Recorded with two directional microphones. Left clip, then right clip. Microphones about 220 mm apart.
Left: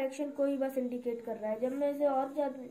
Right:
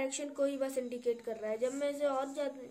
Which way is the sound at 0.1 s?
45° right (ahead or behind).